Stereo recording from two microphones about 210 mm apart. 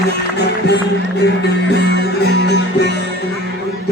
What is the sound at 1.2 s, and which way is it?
Speech, 55° left (ahead or behind).